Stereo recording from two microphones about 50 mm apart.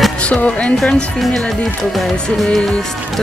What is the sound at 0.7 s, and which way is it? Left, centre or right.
Speech, centre.